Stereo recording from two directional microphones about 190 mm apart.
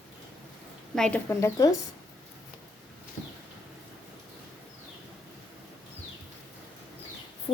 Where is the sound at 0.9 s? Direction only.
5° left (ahead or behind).